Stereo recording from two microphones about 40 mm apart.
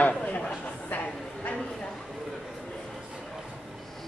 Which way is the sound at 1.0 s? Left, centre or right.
Left.